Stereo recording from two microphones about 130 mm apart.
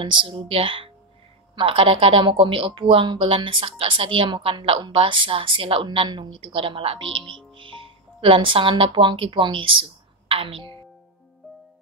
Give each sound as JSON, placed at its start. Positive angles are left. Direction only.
{"t": 0.0, "sound": "speech", "side_deg": -40}
{"t": 11.4, "sound": "music", "side_deg": 0}